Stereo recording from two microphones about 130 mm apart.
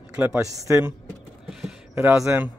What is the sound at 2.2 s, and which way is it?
Speech, 20° right (ahead or behind).